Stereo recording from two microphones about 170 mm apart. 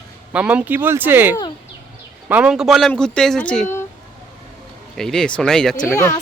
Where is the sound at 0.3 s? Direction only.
10° right (ahead or behind); by 3.8 s 10° left (ahead or behind).